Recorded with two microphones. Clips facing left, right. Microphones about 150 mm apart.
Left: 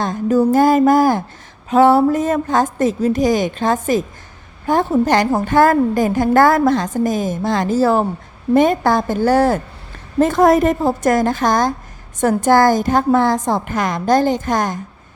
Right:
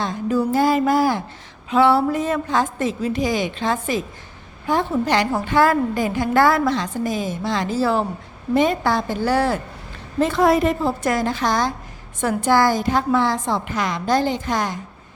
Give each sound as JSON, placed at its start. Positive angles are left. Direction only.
{"t": 0.0, "sound": "a woman's voice", "side_deg": 45}